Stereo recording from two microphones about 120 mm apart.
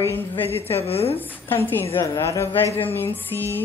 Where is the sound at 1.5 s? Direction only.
20° left (ahead or behind).